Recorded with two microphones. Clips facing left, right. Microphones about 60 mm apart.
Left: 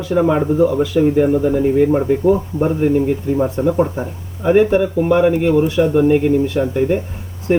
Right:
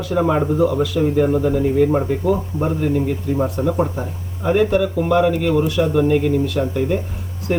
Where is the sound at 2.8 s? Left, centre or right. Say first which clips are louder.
Left 4 dB; left.